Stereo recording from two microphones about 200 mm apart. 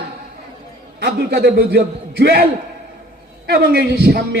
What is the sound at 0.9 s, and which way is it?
A man's voice, 50° right (ahead or behind).